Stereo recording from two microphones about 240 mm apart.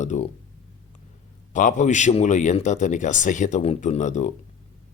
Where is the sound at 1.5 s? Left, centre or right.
Left.